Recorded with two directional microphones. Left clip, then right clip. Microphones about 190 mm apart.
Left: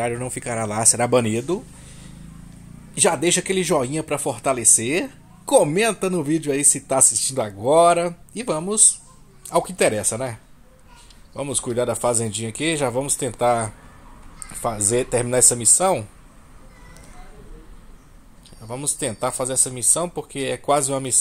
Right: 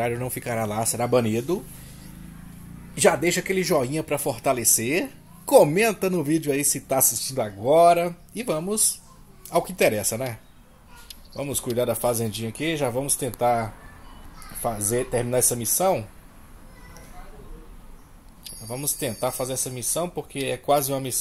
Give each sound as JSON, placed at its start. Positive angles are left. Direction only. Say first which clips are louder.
{"t": 0.0, "sound": "speech", "louder": "left 2 dB", "side_deg": 5}
{"t": 0.7, "sound": "a man's voice", "louder": "left 5 dB", "side_deg": 20}
{"t": 2.9, "sound": "a man's voice", "louder": "left 1 dB", "side_deg": 10}
{"t": 11.3, "sound": "a man's voice", "louder": "left 2 dB", "side_deg": 10}
{"t": 18.9, "sound": "a man's voice", "louder": "left 2 dB", "side_deg": 10}